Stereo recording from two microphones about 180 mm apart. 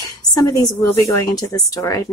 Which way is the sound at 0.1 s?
20° left (ahead or behind).